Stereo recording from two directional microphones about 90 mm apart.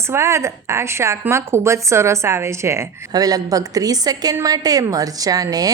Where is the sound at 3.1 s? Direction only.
45° right (ahead or behind).